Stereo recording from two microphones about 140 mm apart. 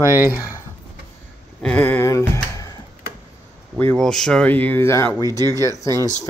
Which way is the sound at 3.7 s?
5° left (ahead or behind).